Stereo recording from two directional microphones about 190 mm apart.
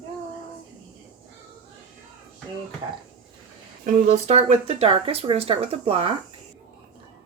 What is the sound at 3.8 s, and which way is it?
Speech, 35° right (ahead or behind).